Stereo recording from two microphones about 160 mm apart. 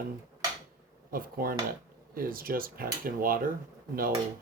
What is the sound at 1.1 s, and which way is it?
Speech, 65° right (ahead or behind).